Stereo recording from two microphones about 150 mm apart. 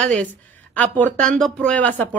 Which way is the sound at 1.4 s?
5° left (ahead or behind).